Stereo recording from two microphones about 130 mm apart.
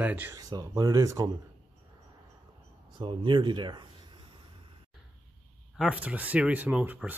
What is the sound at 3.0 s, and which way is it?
Speech, 40° right (ahead or behind).